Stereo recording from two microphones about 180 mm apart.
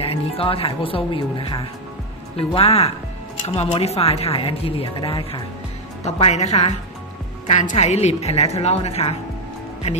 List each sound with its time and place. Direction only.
0.0 s speech: 30° left (ahead or behind)